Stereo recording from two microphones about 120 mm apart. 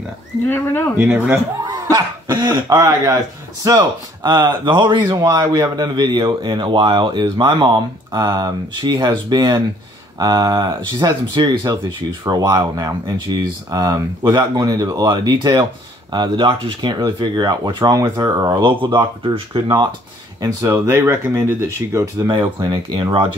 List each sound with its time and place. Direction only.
0.5 s speech: 20° left (ahead or behind)
0.9 s speech: 15° right (ahead or behind)
1.7 s speech: 35° right (ahead or behind)
20.3 s speech: 30° right (ahead or behind)
22.3 s speech: 40° right (ahead or behind)